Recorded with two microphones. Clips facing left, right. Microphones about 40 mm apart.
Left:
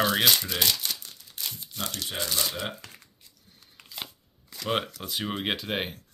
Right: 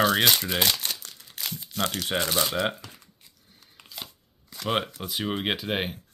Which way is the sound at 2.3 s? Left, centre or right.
Right.